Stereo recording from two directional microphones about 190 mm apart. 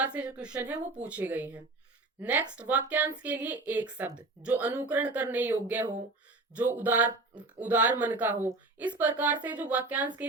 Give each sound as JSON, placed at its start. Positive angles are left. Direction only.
{"t": 0.0, "sound": "a woman's voice", "side_deg": -5}